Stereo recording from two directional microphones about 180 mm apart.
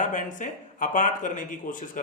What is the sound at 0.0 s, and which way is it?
Speech, 45° left (ahead or behind).